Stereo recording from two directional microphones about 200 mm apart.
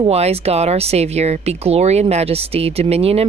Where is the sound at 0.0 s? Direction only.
30° right (ahead or behind).